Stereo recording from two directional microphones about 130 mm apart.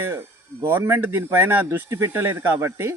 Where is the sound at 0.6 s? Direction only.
15° right (ahead or behind).